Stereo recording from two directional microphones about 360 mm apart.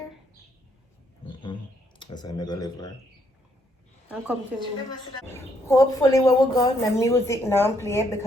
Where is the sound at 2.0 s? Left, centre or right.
Centre.